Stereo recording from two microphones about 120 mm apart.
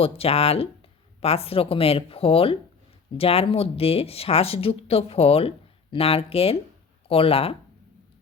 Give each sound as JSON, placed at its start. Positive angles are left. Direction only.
{"t": 0.0, "sound": "speech", "side_deg": 55}